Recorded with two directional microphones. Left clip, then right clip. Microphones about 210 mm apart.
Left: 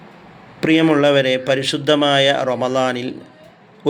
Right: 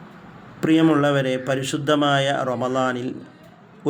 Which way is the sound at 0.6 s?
5° right (ahead or behind).